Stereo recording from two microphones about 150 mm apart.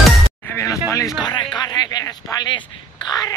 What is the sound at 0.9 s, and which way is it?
Music, 20° left (ahead or behind).